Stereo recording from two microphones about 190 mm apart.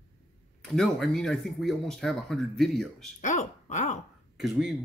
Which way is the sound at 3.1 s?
40° left (ahead or behind).